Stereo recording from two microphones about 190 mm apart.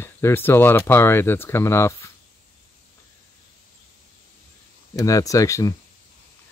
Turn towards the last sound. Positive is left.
turn(degrees=15)  # may be behind; listen again after turning